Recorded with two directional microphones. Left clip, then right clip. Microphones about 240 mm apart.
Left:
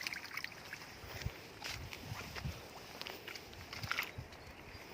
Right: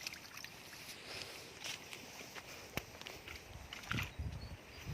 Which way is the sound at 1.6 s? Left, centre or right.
Centre.